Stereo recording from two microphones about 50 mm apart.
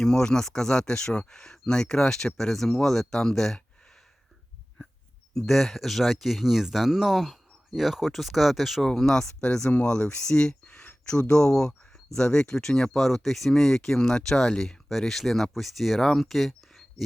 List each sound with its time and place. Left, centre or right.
0.0 s speech: centre
5.3 s speech: centre
8.9 s speech: centre